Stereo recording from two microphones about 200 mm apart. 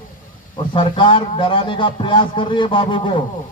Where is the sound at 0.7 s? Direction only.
25° left (ahead or behind).